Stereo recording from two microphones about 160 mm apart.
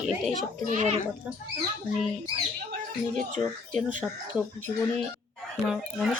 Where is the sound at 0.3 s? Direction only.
50° right (ahead or behind).